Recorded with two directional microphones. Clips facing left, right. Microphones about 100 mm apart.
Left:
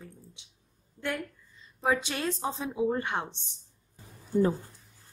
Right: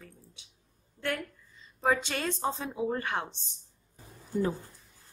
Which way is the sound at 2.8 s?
20° left (ahead or behind).